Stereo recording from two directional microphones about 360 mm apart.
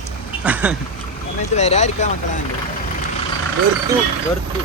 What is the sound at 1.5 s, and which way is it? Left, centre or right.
Speech, centre.